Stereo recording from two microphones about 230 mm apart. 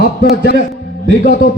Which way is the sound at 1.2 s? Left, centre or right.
Left.